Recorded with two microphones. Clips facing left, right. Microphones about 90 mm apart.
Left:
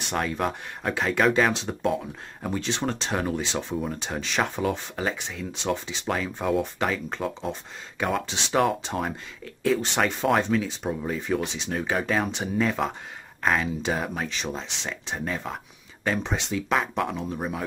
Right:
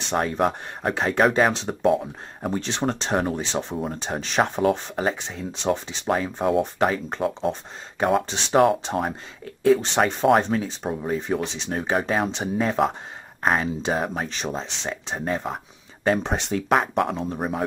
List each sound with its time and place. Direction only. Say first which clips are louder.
0.0 s speech: right 4 dB; 30° right (ahead or behind)
9.0 s speech: right 3 dB; 25° right (ahead or behind)
16.1 s speech: right 5 dB; 45° right (ahead or behind)
17.3 s speech: right 4 dB; 35° right (ahead or behind)